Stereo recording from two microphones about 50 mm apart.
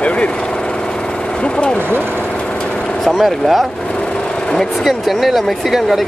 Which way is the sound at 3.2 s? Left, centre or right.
Centre.